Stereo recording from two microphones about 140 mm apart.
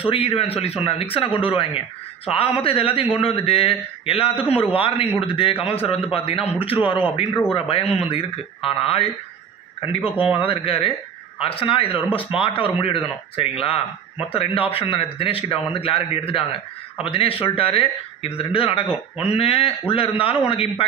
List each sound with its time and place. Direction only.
0.0 s a man's voice: 40° left (ahead or behind)